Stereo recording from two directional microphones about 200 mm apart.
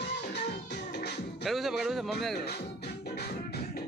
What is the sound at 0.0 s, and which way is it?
Music, 55° left (ahead or behind).